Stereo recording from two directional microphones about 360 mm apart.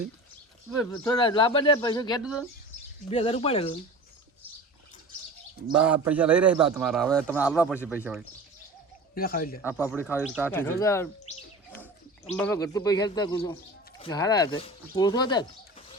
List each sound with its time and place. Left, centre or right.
0.8 s speech: centre
2.2 s a man's voice: centre
3.1 s speech: centre
5.6 s a man's voice: centre
9.1 s speech: left
9.6 s a man's voice: centre
12.3 s speech: centre